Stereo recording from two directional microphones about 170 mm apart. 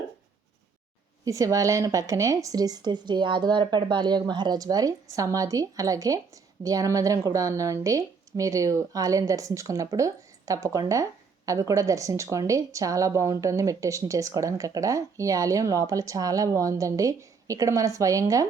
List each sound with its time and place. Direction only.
1.2 s a woman's voice: 20° right (ahead or behind)